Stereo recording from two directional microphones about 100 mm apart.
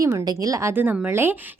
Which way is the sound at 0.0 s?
40° right (ahead or behind).